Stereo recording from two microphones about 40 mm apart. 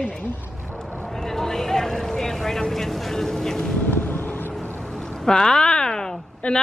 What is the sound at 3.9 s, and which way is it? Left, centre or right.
Vehicle, left.